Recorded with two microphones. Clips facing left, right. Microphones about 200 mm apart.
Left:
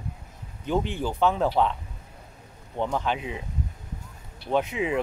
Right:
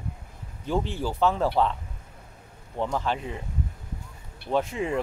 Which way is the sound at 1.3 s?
Centre (ahead or behind).